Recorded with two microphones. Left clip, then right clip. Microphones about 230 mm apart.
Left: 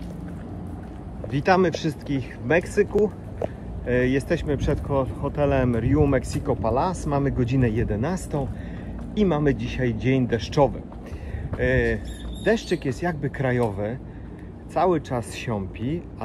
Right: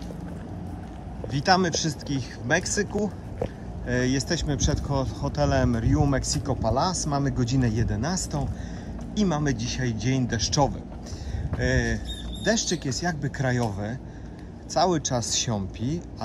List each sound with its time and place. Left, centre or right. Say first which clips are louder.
1.3 s speech: left 2 dB; centre